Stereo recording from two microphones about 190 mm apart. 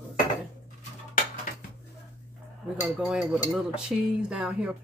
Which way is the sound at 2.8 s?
5° right (ahead or behind).